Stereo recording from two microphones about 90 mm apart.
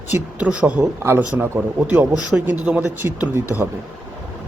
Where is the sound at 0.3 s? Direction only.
15° right (ahead or behind).